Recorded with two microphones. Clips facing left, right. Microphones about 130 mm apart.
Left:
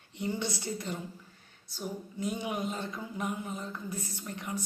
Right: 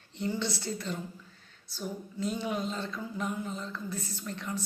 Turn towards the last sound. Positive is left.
turn(degrees=15)  # may be behind; listen again after turning